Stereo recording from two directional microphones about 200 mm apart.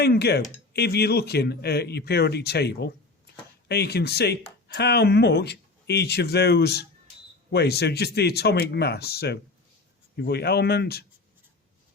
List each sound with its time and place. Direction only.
0.0 s a man's voice: 55° left (ahead or behind)